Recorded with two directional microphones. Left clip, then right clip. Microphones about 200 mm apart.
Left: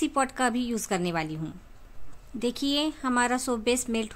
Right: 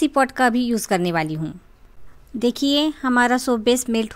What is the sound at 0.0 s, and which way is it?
Speech, 30° right (ahead or behind).